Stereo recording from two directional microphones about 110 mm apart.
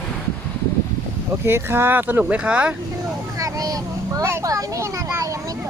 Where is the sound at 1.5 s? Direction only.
20° right (ahead or behind).